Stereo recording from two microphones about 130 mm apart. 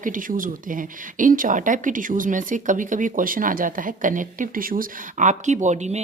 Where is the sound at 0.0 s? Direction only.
90° right.